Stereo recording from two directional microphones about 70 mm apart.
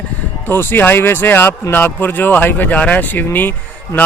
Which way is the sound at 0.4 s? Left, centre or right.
Left.